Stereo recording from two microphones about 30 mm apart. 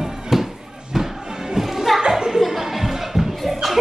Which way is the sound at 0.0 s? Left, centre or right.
Centre.